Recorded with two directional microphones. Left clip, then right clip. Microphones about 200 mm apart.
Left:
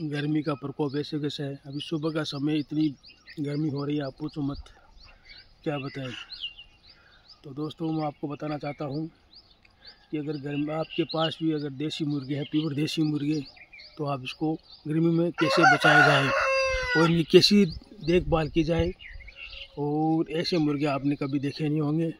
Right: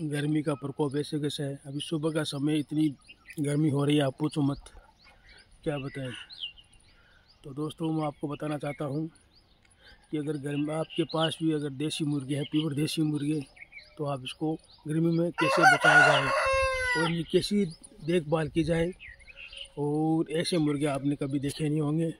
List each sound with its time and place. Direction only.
0.0 s speech: 5° right (ahead or behind)
3.3 s speech: 25° right (ahead or behind)
3.7 s speech: 45° right (ahead or behind)
6.0 s speech: 20° left (ahead or behind)
7.4 s speech: 5° right (ahead or behind)
9.8 s a sound: 5° right (ahead or behind)
11.2 s speech: 5° right (ahead or behind); by 15.3 s 10° left (ahead or behind)
15.5 s chicken: 55° right (ahead or behind)
16.3 s fowl: 40° right (ahead or behind)
17.2 s speech: 45° left (ahead or behind)
17.6 s speech: 20° left (ahead or behind)